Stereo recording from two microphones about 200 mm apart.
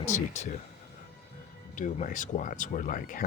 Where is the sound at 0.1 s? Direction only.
35° left (ahead or behind).